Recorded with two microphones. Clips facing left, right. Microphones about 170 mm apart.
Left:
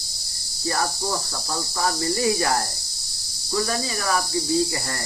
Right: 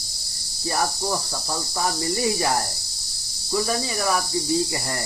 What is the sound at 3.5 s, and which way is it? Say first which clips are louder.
Speech: right 1 dB; 20° right (ahead or behind).